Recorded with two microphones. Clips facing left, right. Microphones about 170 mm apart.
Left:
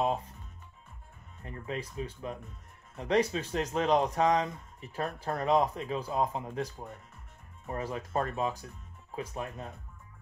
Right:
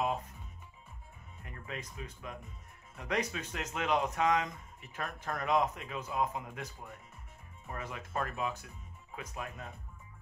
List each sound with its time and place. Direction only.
1.4 s speech: 30° left (ahead or behind)